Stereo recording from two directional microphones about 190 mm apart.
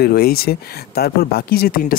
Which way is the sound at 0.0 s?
55° left (ahead or behind).